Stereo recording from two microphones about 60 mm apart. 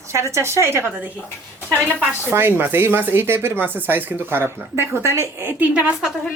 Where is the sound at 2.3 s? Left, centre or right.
Right.